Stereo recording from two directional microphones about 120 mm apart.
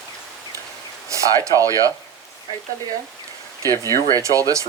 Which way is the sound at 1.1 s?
25° right (ahead or behind).